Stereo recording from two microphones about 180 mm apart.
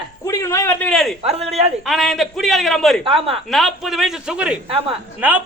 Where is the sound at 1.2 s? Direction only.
35° right (ahead or behind).